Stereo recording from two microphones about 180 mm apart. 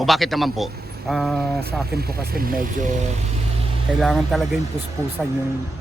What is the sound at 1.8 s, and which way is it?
Speech, 60° right (ahead or behind).